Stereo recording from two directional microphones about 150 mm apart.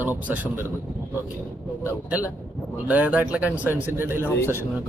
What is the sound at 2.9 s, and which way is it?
A man's voice, 10° right (ahead or behind).